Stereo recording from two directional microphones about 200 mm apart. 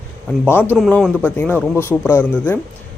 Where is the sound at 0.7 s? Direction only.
Centre (ahead or behind).